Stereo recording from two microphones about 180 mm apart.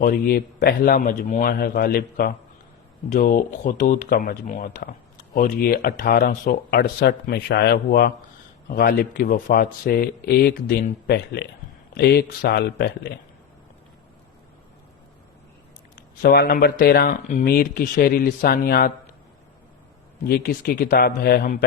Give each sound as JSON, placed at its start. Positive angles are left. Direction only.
{"t": 0.0, "sound": "speech", "side_deg": 55}
{"t": 3.1, "sound": "speech", "side_deg": 50}
{"t": 8.6, "sound": "speech", "side_deg": 50}
{"t": 16.0, "sound": "speech", "side_deg": 55}
{"t": 20.2, "sound": "speech", "side_deg": 60}